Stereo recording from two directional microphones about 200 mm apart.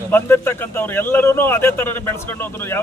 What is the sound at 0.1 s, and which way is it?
A man's voice, 10° left (ahead or behind).